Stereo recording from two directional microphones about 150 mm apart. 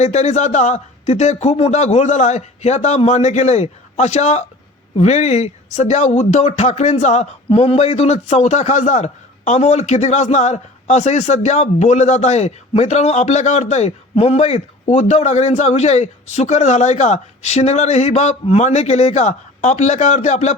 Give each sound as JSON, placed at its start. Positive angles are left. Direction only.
{"t": 0.0, "sound": "speech", "side_deg": 50}